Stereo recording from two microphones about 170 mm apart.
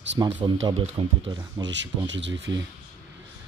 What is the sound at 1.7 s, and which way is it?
Speech, 90° right.